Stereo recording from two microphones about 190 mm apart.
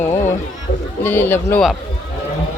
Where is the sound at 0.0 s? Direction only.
15° left (ahead or behind).